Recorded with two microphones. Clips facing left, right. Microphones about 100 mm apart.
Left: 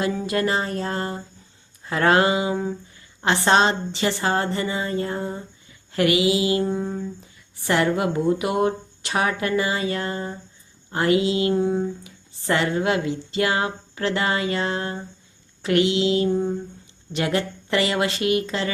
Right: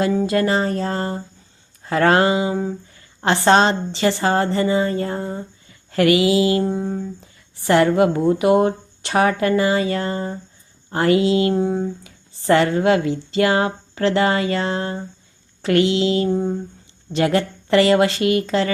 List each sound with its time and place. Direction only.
0.0 s speech: 35° right (ahead or behind)
6.0 s mantra: 20° left (ahead or behind)
6.6 s mantra: 20° right (ahead or behind)
7.7 s speech: 35° right (ahead or behind)
11.5 s speech: 30° right (ahead or behind)